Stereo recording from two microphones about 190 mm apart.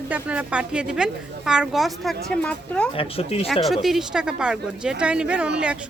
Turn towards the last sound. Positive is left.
turn(degrees=-5)  # may be behind; listen again after turning